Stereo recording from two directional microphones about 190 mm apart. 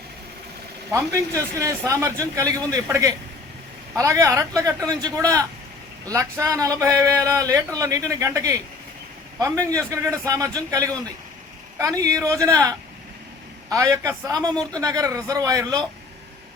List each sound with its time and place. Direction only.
0.9 s speech: 15° right (ahead or behind)